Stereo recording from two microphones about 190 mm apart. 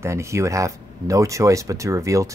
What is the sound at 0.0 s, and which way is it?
Speech, 15° right (ahead or behind).